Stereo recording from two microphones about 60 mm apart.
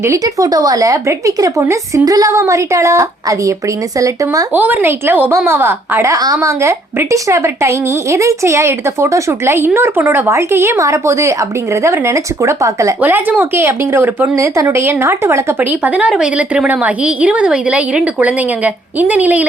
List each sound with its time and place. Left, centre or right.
0.0 s speech: right
2.0 s a woman's voice: right
4.5 s speech: right
6.1 s a woman's voice: right
9.6 s speech: right
13.0 s speech: right
14.3 s a woman's voice: right
14.8 s speech: right
16.0 s speech: centre
16.6 s a woman's voice: right